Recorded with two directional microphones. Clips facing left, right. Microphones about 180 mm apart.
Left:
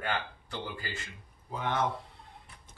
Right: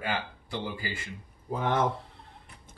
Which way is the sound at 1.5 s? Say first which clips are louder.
Right 5 dB; 50° right (ahead or behind).